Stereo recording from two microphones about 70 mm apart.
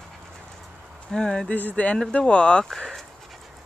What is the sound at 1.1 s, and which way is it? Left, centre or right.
Speech, centre.